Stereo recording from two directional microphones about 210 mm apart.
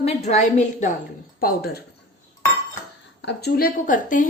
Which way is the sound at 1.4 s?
45° left (ahead or behind).